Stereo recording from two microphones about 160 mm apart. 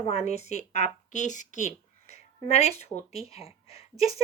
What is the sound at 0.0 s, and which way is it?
A woman's voice, 40° left (ahead or behind).